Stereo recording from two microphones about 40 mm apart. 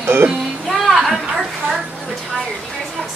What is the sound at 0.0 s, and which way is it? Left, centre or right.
Music, right.